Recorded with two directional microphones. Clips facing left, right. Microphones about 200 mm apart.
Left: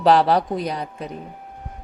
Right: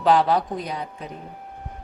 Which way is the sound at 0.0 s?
35° left (ahead or behind).